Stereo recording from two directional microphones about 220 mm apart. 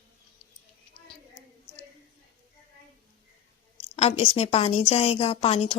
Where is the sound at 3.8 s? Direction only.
30° left (ahead or behind).